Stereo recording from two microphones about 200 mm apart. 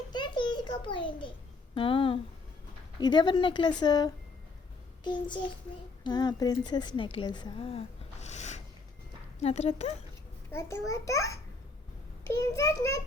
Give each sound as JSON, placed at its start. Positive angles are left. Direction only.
{"t": 0.1, "sound": "a sound", "side_deg": 20}
{"t": 1.7, "sound": "a woman's voice", "side_deg": 25}
{"t": 10.5, "sound": "a child's voice", "side_deg": 15}